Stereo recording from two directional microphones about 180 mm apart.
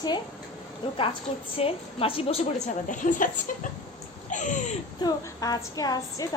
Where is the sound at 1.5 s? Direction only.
30° left (ahead or behind).